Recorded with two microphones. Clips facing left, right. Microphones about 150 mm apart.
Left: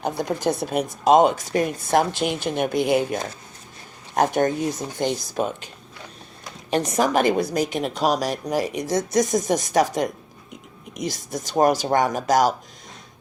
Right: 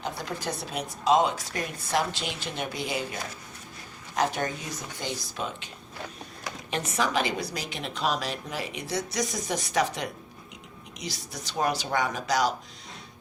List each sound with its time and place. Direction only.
0.0 s a woman's voice: 50° left (ahead or behind)
5.3 s a woman's voice: 40° left (ahead or behind)